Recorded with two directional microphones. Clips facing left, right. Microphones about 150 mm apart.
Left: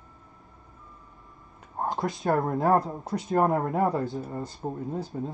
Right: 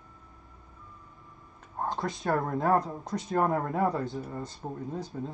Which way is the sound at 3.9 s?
Centre (ahead or behind).